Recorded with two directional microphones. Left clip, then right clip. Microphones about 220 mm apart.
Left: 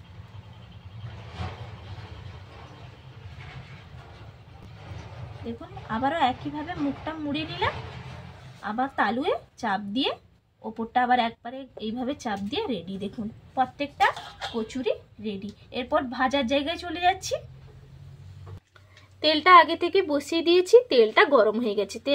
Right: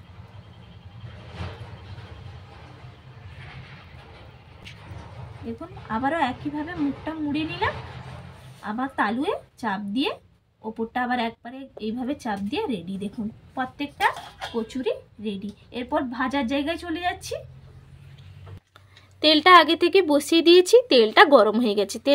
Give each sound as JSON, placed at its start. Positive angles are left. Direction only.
{"t": 5.9, "sound": "speech", "side_deg": 5}
{"t": 19.1, "sound": "speech", "side_deg": -50}